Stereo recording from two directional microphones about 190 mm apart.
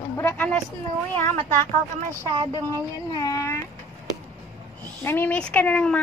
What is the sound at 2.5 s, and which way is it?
Speech, 20° left (ahead or behind).